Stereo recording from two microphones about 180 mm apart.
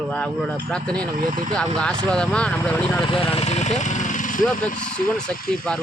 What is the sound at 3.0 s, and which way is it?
Speech, 30° left (ahead or behind).